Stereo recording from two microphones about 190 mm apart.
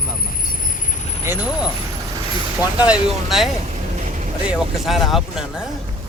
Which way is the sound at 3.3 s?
Centre (ahead or behind).